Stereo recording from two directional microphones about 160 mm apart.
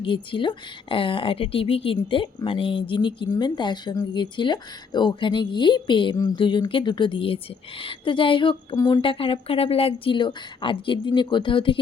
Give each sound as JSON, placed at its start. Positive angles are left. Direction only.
{"t": 0.0, "sound": "speech", "side_deg": 30}